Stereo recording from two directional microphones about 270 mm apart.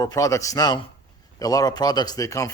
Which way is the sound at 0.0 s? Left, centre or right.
Centre.